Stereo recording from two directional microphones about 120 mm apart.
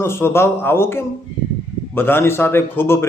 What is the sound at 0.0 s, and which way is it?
A man's voice, 20° left (ahead or behind).